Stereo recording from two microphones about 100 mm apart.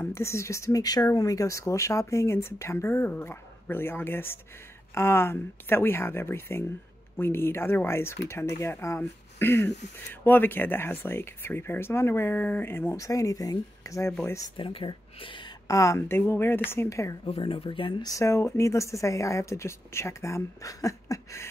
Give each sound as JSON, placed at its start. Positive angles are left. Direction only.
{"t": 0.0, "sound": "speech", "side_deg": 30}
{"t": 12.9, "sound": "speech", "side_deg": 35}
{"t": 14.6, "sound": "speech", "side_deg": 60}
{"t": 15.7, "sound": "speech", "side_deg": 30}
{"t": 17.3, "sound": "speech", "side_deg": 65}
{"t": 18.0, "sound": "speech", "side_deg": 30}